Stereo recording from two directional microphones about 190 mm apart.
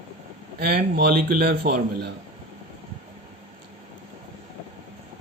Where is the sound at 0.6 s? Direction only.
50° right (ahead or behind).